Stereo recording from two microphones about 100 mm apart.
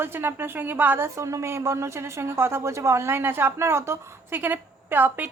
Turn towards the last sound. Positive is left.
turn(degrees=-20)  # may be behind; listen again after turning